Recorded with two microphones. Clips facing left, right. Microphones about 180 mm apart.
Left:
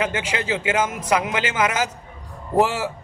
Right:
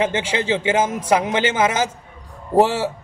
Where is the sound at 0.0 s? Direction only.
25° right (ahead or behind).